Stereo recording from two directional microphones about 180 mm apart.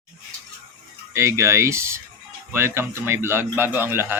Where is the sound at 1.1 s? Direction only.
15° right (ahead or behind).